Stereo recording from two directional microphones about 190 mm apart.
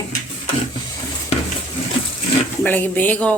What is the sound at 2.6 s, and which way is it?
Speech, 10° left (ahead or behind).